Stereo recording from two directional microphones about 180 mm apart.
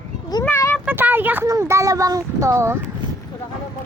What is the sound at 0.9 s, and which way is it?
Speech, 10° right (ahead or behind).